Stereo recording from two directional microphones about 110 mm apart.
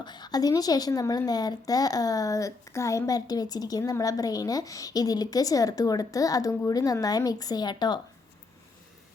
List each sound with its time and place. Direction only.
0.0 s a woman's voice: 40° left (ahead or behind)